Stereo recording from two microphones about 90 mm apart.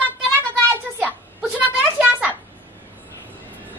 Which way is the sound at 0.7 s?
15° right (ahead or behind).